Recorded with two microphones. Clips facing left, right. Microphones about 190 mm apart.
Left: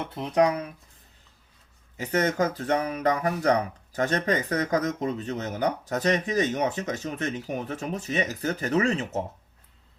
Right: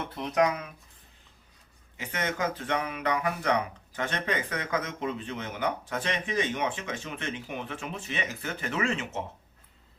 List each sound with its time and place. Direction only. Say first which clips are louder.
0.1 s speech: left 4 dB; 30° left (ahead or behind)
2.0 s speech: left 7 dB; 40° left (ahead or behind)